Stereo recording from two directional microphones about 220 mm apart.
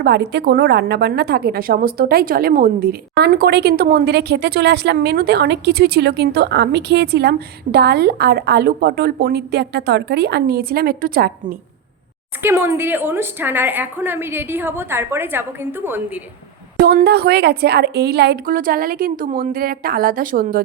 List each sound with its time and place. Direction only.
0.0 s a woman's voice: 50° right (ahead or behind)
12.4 s a woman's voice: 10° right (ahead or behind)
16.8 s a woman's voice: 45° right (ahead or behind)